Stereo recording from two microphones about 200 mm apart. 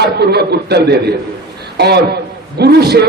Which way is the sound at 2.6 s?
55° right (ahead or behind).